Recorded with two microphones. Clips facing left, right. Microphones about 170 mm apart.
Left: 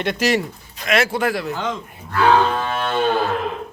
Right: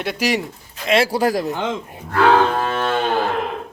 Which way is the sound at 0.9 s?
30° right (ahead or behind).